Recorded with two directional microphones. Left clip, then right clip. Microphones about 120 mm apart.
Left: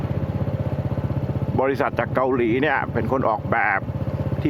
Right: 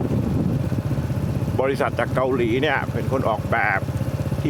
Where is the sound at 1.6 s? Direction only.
15° left (ahead or behind).